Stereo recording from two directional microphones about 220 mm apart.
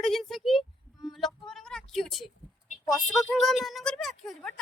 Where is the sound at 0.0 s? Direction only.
Centre (ahead or behind).